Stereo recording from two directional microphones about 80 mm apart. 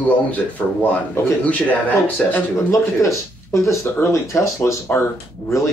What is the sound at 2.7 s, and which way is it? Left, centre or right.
Speech, left.